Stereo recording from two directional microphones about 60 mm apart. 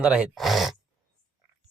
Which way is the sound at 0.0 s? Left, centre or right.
Centre.